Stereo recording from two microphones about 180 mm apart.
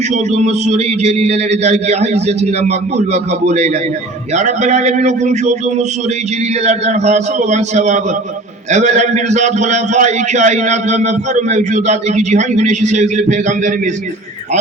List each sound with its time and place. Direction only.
0.1 s a man's voice: 35° right (ahead or behind)